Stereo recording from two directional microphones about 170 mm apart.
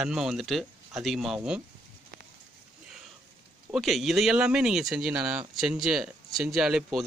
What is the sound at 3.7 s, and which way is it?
Speech, centre (ahead or behind).